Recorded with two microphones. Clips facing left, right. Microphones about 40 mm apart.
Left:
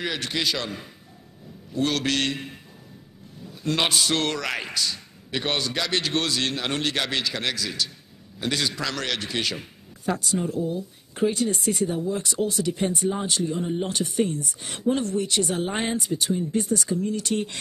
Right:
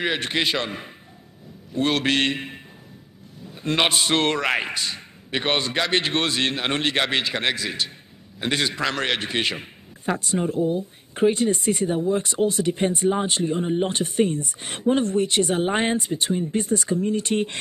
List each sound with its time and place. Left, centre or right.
0.0 s a man's voice: right